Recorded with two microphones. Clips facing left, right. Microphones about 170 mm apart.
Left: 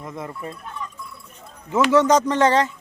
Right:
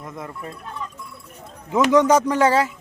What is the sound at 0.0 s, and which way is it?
Speech, centre (ahead or behind).